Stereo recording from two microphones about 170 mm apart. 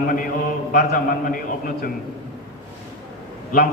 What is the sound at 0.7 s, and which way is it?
A man's voice, 55° left (ahead or behind).